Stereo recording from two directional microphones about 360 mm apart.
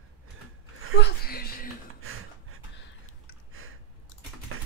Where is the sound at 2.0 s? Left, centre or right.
Right.